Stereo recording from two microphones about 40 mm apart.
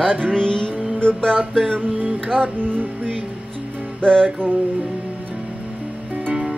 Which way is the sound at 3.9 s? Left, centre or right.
Left.